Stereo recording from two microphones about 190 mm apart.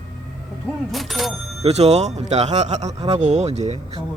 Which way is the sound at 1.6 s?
35° right (ahead or behind).